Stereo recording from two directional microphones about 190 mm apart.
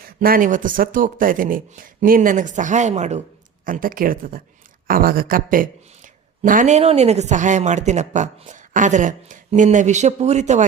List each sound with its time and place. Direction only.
0.2 s speech: 50° right (ahead or behind)
3.7 s speech: 45° right (ahead or behind)